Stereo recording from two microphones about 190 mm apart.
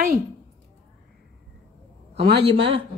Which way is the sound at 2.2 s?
60° right (ahead or behind).